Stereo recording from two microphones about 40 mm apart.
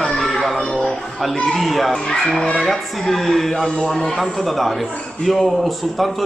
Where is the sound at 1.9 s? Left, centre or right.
Centre.